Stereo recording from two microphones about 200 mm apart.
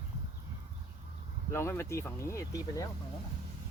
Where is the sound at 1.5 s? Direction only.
10° left (ahead or behind).